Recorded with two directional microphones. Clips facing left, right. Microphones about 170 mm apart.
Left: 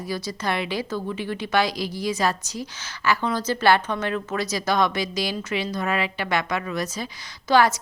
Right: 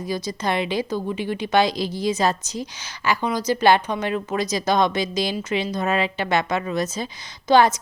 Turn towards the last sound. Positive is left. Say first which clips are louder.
# right 3 dB
turn(degrees=-20)  # may be behind; listen again after turning